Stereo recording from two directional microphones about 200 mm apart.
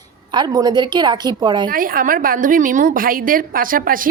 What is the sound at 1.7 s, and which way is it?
A woman's voice, 45° right (ahead or behind).